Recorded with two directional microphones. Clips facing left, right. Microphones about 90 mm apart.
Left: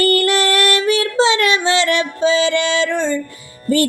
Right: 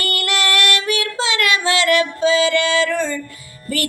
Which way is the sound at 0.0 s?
35° left (ahead or behind).